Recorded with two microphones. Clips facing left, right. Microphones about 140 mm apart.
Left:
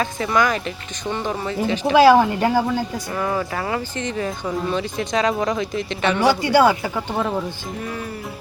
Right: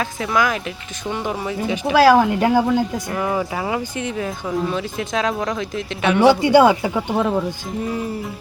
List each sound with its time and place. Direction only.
0.0 s speech: centre (ahead or behind)
6.1 s speech: 25° right (ahead or behind)
6.9 s speech: 10° right (ahead or behind)